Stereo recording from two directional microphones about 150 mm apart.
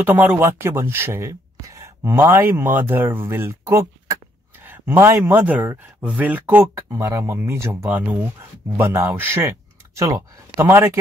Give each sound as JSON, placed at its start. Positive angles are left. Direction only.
{"t": 0.0, "sound": "speech", "side_deg": -10}